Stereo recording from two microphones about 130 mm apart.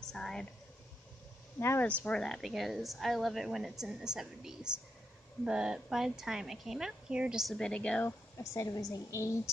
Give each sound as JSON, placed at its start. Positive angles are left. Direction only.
{"t": 0.1, "sound": "a sound", "side_deg": 5}
{"t": 1.6, "sound": "a woman's voice", "side_deg": 15}
{"t": 8.5, "sound": "a woman's voice", "side_deg": 25}